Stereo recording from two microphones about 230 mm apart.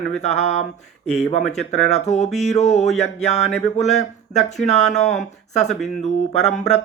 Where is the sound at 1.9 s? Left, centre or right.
Left.